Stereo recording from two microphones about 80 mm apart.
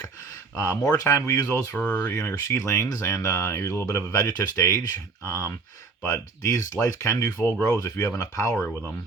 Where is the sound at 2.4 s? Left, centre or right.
Left.